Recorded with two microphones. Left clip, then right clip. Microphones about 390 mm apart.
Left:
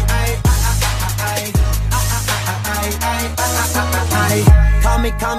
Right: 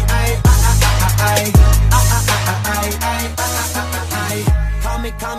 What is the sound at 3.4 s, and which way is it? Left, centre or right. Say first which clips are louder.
Music: left 3 dB; left.